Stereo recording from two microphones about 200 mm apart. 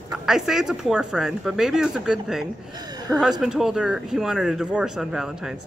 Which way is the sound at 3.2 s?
5° right (ahead or behind).